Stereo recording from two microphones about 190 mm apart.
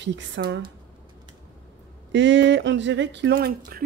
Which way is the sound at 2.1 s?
70° right (ahead or behind).